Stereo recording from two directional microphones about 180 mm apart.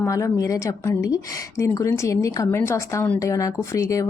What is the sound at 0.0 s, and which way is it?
A woman's voice, 15° left (ahead or behind).